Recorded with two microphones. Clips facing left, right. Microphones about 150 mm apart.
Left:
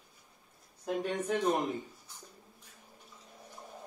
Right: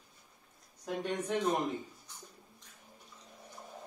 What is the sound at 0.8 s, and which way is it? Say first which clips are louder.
Speech: left 2 dB; centre (ahead or behind).